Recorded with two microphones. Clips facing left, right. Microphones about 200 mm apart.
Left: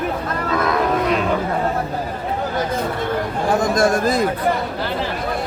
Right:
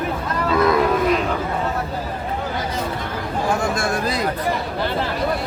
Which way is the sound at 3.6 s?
40° left (ahead or behind).